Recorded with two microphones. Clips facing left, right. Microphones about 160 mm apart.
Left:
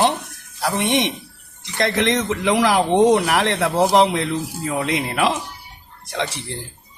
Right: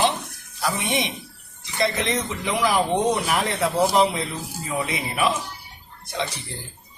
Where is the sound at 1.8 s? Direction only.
80° left.